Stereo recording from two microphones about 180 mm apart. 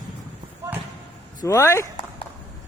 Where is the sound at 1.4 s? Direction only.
15° left (ahead or behind).